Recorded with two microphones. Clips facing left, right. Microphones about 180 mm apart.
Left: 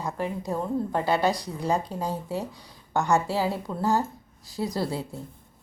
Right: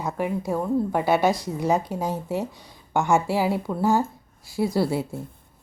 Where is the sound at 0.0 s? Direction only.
10° right (ahead or behind).